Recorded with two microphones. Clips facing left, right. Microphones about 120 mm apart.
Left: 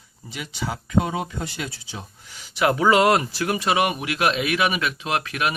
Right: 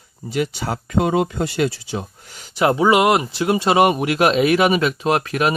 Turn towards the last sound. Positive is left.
turn(degrees=-35)  # may be behind; listen again after turning